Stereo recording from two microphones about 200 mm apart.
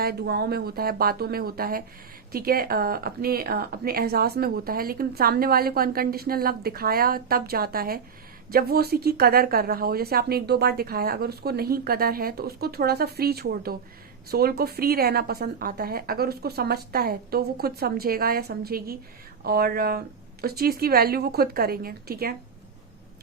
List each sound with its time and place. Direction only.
0.0 s speech: 50° right (ahead or behind)